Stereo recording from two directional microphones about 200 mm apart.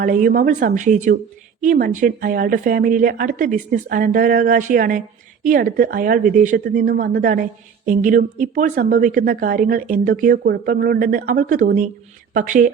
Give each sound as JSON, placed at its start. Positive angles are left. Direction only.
{"t": 0.0, "sound": "speech", "side_deg": -45}